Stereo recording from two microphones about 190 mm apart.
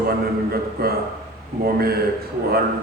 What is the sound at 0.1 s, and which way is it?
A man's voice, 55° right (ahead or behind).